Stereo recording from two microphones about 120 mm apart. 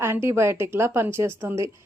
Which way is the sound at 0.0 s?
20° right (ahead or behind).